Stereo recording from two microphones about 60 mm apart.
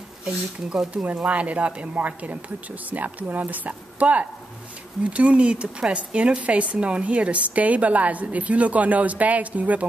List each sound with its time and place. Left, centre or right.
0.2 s speech: centre
1.0 s speech: right